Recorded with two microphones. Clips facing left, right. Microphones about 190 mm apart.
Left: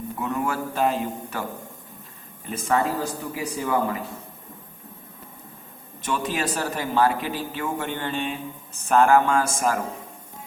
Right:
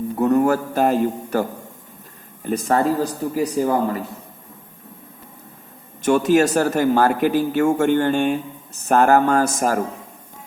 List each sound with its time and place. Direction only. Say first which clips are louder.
0.2 s a man's voice: right 10 dB; 45° right (ahead or behind)
2.5 s a man's voice: right 5 dB; 40° right (ahead or behind)
6.0 s speech: right 11 dB; 45° right (ahead or behind)